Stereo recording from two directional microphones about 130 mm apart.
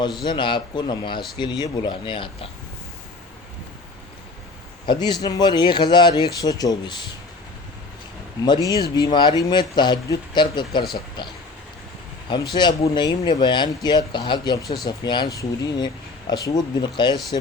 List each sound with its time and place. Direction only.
0.3 s speech: 40° left (ahead or behind)
4.9 s speech: 35° left (ahead or behind)
8.4 s speech: 35° left (ahead or behind)